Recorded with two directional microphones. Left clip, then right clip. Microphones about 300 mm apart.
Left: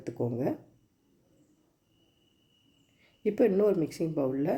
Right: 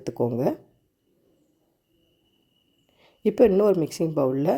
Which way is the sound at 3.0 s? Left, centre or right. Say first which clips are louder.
Right 7 dB; right.